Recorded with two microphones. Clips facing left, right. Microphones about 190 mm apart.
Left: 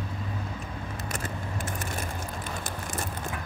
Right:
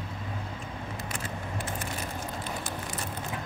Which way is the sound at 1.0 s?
45° left (ahead or behind).